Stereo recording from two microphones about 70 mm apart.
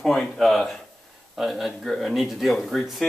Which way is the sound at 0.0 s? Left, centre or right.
Centre.